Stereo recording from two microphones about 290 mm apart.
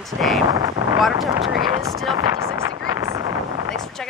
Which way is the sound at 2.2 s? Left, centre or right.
Centre.